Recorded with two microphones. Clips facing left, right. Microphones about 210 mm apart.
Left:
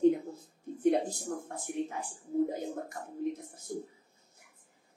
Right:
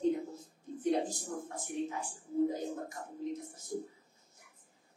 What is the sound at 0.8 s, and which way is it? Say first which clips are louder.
A woman's voice: left 4 dB; 60° left (ahead or behind).